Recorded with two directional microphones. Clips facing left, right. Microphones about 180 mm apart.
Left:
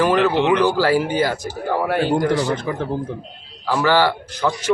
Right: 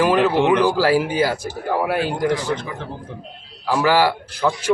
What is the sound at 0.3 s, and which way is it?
Speech, 50° right (ahead or behind).